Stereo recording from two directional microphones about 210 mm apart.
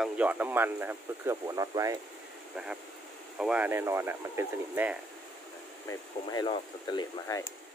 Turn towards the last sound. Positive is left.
turn(degrees=20)  # may be behind; listen again after turning